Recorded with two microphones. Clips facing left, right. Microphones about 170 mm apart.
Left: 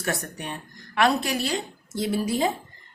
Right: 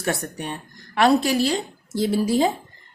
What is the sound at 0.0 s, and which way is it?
A woman's voice, 30° right (ahead or behind).